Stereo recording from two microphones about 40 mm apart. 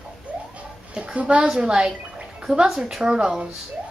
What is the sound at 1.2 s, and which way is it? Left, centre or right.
Speech, right.